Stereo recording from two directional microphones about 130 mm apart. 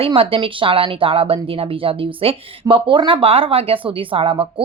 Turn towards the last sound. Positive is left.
turn(degrees=-45)  # may be behind; listen again after turning